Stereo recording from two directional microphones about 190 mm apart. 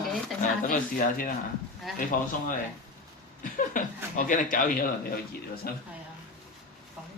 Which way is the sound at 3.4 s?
45° left (ahead or behind).